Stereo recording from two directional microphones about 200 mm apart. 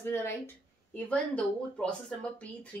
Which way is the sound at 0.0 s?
10° left (ahead or behind).